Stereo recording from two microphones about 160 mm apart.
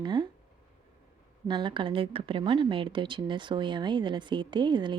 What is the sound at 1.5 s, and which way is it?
A woman's voice, 30° right (ahead or behind).